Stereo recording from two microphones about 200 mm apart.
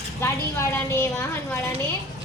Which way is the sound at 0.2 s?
10° left (ahead or behind).